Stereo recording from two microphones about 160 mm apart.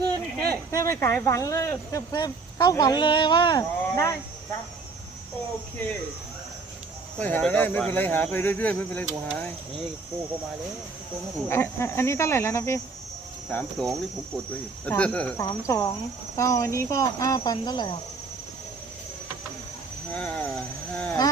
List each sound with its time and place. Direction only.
0.5 s speech: 20° left (ahead or behind)
7.2 s speech: 10° left (ahead or behind)
11.4 s speech: 15° left (ahead or behind)
13.5 s speech: 5° left (ahead or behind)
15.4 s speech: 20° left (ahead or behind)
20.1 s speech: 5° left (ahead or behind)